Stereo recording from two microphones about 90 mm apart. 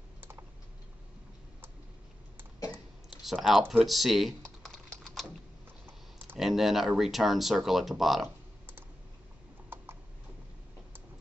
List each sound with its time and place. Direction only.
0.2 s typing: 25° right (ahead or behind)
3.3 s speech: centre (ahead or behind)
5.0 s typing: 5° left (ahead or behind)
6.3 s speech: 5° right (ahead or behind)